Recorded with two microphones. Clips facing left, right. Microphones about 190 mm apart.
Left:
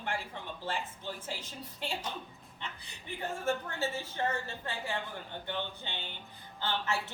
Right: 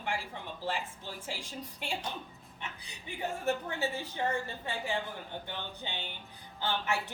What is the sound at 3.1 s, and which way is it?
A woman's voice, 15° right (ahead or behind).